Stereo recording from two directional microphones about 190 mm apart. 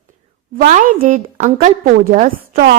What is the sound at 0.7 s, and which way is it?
A woman's voice, 40° right (ahead or behind).